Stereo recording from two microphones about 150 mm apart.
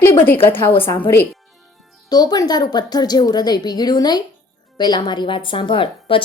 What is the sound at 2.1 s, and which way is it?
A woman's voice, 25° left (ahead or behind).